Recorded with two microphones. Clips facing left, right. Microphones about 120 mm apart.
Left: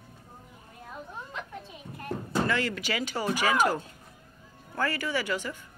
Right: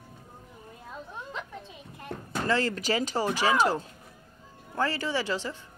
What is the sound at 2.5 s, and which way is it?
Speech, 35° right (ahead or behind).